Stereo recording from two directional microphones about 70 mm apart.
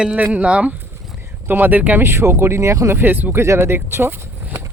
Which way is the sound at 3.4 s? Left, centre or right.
Right.